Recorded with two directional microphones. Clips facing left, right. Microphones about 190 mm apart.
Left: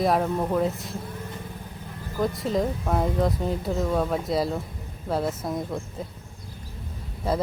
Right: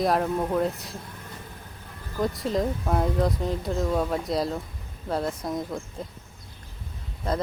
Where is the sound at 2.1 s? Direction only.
Centre (ahead or behind).